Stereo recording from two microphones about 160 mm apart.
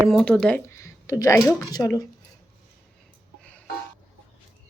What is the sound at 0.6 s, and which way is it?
Speech, 15° left (ahead or behind).